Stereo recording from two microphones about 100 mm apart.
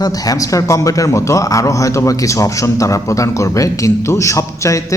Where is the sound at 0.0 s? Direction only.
35° left (ahead or behind).